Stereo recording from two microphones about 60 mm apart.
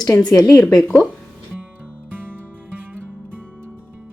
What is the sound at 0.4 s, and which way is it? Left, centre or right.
Speech, left.